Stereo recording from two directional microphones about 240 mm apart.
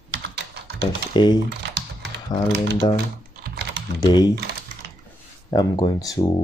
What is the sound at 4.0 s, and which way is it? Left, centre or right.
Speech, centre.